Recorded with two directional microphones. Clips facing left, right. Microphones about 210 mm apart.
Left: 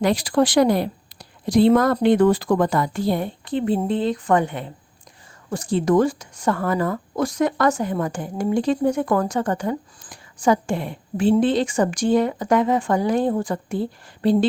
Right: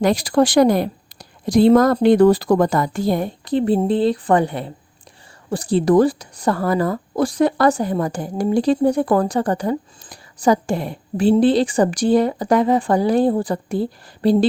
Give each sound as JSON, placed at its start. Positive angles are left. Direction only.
{"t": 0.0, "sound": "a woman's voice", "side_deg": -45}